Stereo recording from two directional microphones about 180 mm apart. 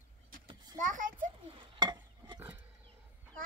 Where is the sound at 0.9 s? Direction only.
45° right (ahead or behind).